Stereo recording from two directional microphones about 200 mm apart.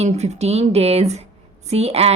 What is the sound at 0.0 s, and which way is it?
A woman's voice, 35° right (ahead or behind).